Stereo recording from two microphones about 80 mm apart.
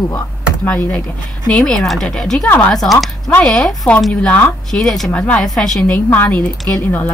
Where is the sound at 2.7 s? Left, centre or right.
Centre.